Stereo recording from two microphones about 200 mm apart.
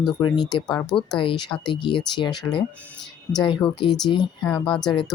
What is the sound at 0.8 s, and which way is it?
Speech, 20° left (ahead or behind).